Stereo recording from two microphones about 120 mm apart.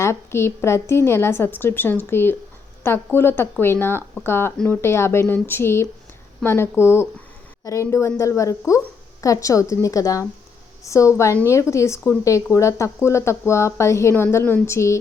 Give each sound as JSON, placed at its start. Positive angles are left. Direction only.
{"t": 0.0, "sound": "speech", "side_deg": 20}
{"t": 4.8, "sound": "speech", "side_deg": 20}